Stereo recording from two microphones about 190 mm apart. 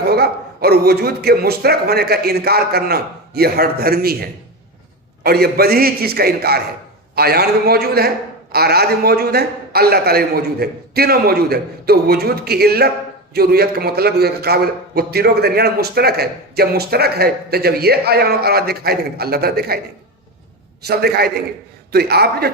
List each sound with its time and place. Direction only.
0.0 s a man's voice: 55° right (ahead or behind)
20.8 s a man's voice: 55° right (ahead or behind)